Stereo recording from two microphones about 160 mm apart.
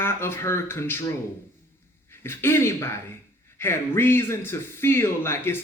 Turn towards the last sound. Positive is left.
turn(degrees=15)  # may be behind; listen again after turning